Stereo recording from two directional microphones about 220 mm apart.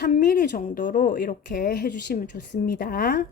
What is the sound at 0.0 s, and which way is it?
Speech, 40° left (ahead or behind).